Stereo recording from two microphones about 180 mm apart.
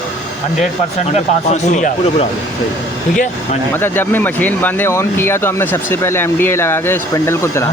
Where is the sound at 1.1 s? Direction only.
40° left (ahead or behind).